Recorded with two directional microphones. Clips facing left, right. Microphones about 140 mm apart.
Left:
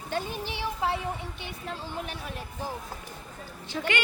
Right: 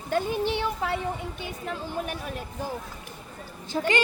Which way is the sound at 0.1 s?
60° right (ahead or behind).